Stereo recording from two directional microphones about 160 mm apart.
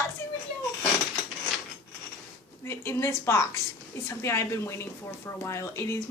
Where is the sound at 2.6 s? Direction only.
15° left (ahead or behind).